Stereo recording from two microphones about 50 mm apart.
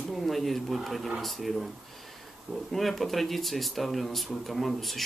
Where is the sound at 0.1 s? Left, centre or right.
Centre.